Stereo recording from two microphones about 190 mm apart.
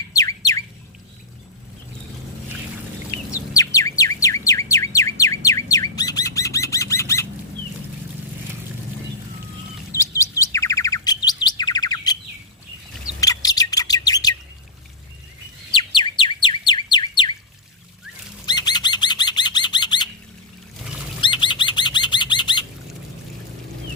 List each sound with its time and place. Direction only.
0.1 s bird: 15° left (ahead or behind)
3.3 s bird: 15° left (ahead or behind)
9.9 s chirp: 15° left (ahead or behind)
13.1 s bird: 20° left (ahead or behind)
15.7 s bird: 25° left (ahead or behind)
18.4 s bird: 20° left (ahead or behind)
21.2 s bird: 25° left (ahead or behind)